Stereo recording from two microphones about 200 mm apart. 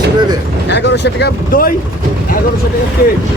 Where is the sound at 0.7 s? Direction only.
60° left (ahead or behind).